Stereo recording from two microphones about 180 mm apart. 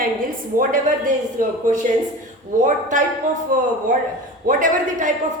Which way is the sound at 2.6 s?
45° right (ahead or behind).